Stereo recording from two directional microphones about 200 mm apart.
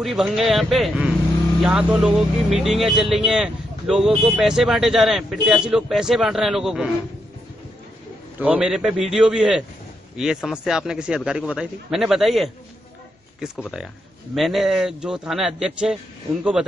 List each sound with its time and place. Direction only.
0.0 s speech: centre (ahead or behind)
8.4 s speech: 5° right (ahead or behind)
13.6 s speech: centre (ahead or behind)